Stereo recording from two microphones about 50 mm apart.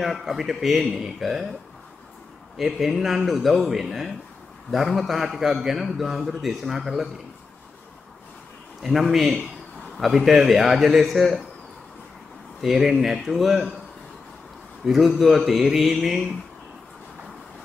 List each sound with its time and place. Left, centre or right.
0.0 s a man's voice: centre
2.5 s a man's voice: centre
8.8 s a man's voice: centre
12.6 s a man's voice: centre
14.9 s a man's voice: centre